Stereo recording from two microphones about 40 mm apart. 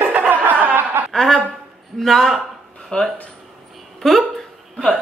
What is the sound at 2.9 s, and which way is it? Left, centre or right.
Speech, left.